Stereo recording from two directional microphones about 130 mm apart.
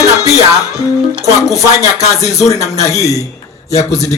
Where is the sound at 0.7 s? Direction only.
25° left (ahead or behind).